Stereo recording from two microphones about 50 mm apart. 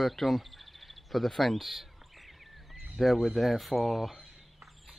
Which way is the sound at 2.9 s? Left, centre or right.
Centre.